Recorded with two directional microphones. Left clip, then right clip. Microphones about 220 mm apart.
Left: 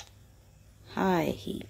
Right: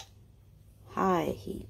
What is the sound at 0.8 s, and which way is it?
Speech, 20° left (ahead or behind).